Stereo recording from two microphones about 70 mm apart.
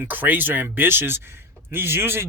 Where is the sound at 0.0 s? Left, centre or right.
Right.